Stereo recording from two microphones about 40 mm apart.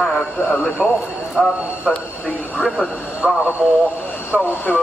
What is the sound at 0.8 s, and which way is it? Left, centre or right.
Speech, left.